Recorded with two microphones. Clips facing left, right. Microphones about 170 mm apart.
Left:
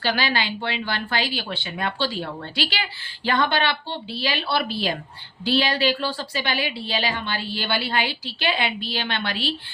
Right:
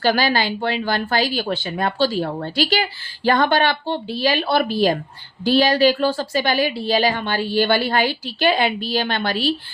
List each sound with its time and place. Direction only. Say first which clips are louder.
0.0 s speech: right 6 dB; 45° right (ahead or behind)